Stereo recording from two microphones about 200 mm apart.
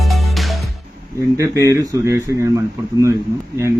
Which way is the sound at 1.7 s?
15° right (ahead or behind).